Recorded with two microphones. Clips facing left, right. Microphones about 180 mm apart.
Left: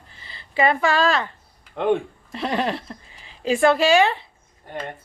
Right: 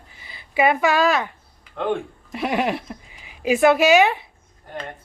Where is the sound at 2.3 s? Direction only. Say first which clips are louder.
Right 2 dB; 10° right (ahead or behind).